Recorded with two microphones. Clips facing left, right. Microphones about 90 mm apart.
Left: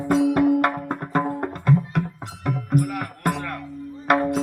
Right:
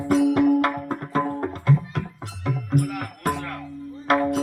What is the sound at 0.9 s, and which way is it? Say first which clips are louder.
Music: left 1 dB; 55° left (ahead or behind).